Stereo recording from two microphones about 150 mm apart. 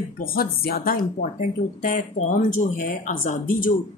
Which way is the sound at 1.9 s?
60° left (ahead or behind).